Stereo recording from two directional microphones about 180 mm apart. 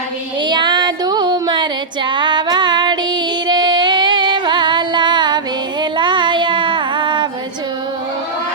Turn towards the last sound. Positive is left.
turn(degrees=-25)  # may be behind; listen again after turning